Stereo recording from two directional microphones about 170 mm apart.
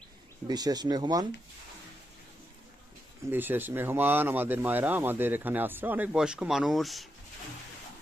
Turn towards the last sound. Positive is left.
turn(degrees=0)  # may be behind; listen again after turning